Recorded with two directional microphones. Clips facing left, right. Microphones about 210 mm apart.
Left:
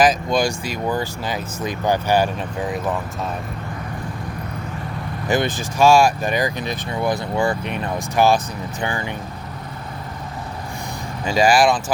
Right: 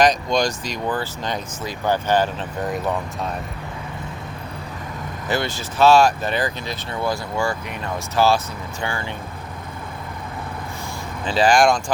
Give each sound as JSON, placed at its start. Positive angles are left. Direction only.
{"t": 0.0, "sound": "speech", "side_deg": 5}
{"t": 5.3, "sound": "speech", "side_deg": 15}
{"t": 11.3, "sound": "speech", "side_deg": 10}